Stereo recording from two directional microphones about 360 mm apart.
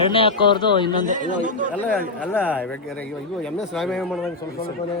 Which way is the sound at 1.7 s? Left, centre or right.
Centre.